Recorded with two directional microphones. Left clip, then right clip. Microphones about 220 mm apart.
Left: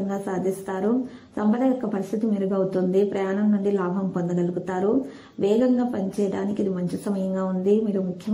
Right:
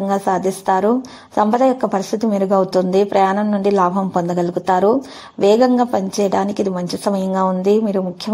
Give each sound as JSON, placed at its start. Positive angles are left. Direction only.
{"t": 0.1, "sound": "a woman's voice", "side_deg": -30}